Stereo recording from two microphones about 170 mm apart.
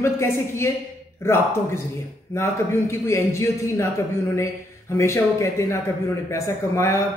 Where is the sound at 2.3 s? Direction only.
15° left (ahead or behind).